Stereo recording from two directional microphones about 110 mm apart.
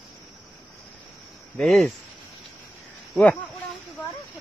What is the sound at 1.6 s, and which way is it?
Speech, 5° left (ahead or behind).